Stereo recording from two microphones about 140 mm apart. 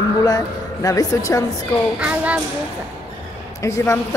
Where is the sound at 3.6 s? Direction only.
20° left (ahead or behind).